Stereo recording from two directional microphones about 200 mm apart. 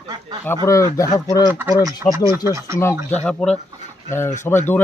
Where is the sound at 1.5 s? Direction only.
10° right (ahead or behind).